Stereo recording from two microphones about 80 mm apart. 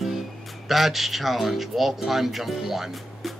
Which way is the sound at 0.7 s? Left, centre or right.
Centre.